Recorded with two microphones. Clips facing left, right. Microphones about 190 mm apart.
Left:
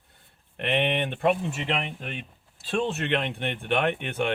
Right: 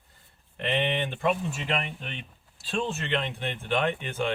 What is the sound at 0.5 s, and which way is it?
Speech, 65° left (ahead or behind).